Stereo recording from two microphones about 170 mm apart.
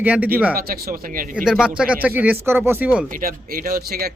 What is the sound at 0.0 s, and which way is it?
Speech, 10° right (ahead or behind).